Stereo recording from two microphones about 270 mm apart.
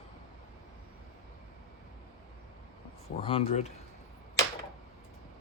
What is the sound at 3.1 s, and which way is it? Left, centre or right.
Speech, centre.